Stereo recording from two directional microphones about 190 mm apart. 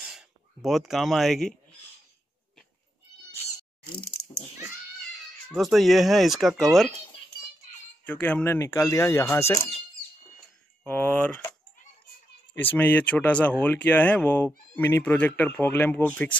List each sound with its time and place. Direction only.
0.0 s speech: 5° right (ahead or behind)
5.5 s speech: centre (ahead or behind)
8.0 s speech: 5° left (ahead or behind)
10.9 s speech: 5° left (ahead or behind)
12.5 s speech: 10° left (ahead or behind)